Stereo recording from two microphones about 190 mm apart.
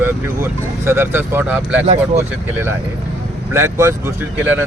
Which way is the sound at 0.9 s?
15° right (ahead or behind).